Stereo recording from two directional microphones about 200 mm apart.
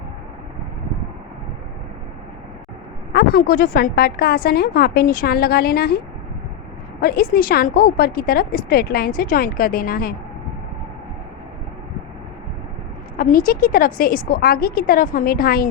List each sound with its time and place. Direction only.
3.1 s a woman's voice: 50° left (ahead or behind)
7.0 s a woman's voice: 45° left (ahead or behind)
13.1 s a woman's voice: 45° left (ahead or behind)